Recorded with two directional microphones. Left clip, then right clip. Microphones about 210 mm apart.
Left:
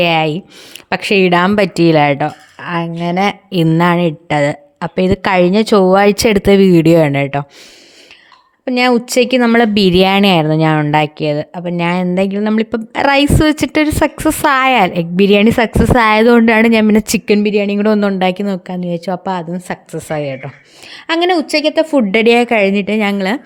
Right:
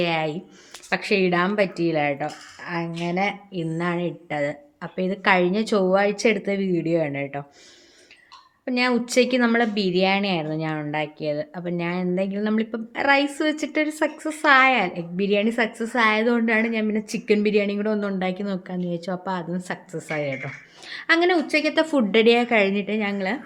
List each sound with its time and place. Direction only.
0.0 s speech: 45° left (ahead or behind)
8.6 s a woman's voice: 45° left (ahead or behind)